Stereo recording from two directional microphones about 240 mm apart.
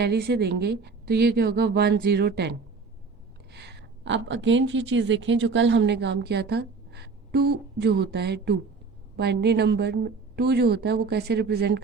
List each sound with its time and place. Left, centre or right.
0.0 s a woman's voice: right